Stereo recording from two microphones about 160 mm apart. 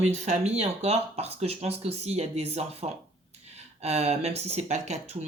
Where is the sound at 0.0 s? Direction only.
45° right (ahead or behind).